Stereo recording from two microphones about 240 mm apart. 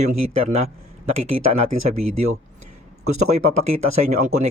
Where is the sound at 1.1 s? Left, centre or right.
Right.